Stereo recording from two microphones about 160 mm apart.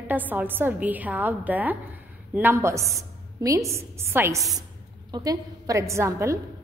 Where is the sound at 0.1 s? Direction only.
10° right (ahead or behind).